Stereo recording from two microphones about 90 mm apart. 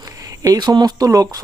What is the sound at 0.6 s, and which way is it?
Speech, 55° right (ahead or behind).